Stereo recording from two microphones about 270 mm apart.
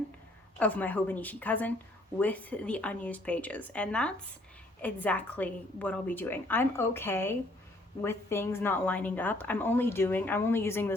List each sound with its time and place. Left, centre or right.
0.6 s a woman's voice: centre